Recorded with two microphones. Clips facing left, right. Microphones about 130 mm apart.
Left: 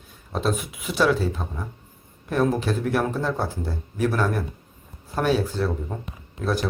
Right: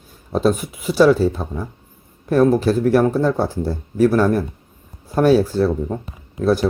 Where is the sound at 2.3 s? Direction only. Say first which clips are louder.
Right 8 dB; 40° right (ahead or behind).